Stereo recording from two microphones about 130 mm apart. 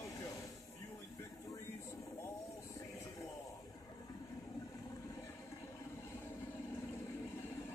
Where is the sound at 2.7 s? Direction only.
25° left (ahead or behind).